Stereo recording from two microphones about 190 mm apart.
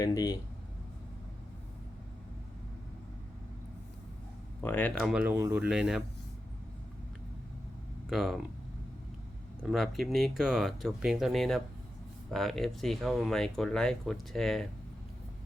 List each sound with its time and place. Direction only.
0.0 s speech: 20° left (ahead or behind)
4.6 s speech: 10° left (ahead or behind)
8.1 s speech: centre (ahead or behind)
9.6 s speech: centre (ahead or behind)